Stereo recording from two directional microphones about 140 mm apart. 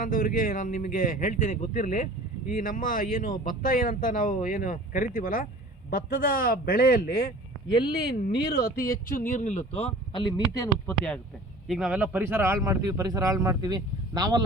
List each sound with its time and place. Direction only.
0.0 s speech: 75° left (ahead or behind)
5.9 s a man's voice: 90° left; by 10.7 s 25° left (ahead or behind)
10.9 s speech: 5° left (ahead or behind)
11.7 s speech: 5° right (ahead or behind); by 14.4 s 30° right (ahead or behind)